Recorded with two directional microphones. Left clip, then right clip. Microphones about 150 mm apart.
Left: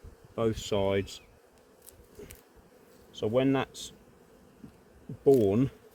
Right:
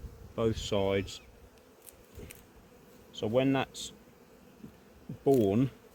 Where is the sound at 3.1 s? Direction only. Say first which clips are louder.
Left 2 dB; 80° left.